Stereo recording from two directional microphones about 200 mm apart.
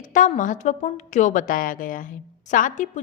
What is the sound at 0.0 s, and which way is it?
Speech, 40° left (ahead or behind).